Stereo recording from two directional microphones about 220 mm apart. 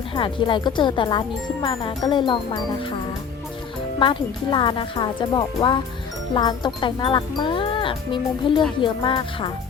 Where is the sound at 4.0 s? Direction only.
25° left (ahead or behind).